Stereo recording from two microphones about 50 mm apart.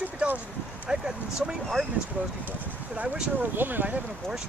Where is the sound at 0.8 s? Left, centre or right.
Centre.